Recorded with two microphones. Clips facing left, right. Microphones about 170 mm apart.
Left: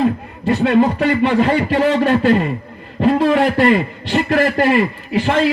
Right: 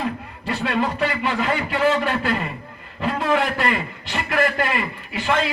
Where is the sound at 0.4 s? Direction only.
25° left (ahead or behind).